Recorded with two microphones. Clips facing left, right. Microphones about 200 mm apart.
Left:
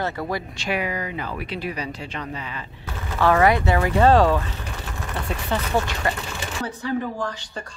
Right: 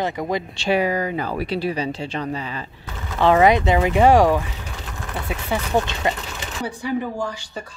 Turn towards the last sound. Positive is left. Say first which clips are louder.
# right 2 dB
turn(degrees=-10)  # may be behind; listen again after turning